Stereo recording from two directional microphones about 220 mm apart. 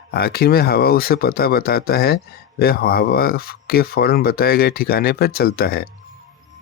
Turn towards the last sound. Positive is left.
turn(degrees=45)  # may be behind; listen again after turning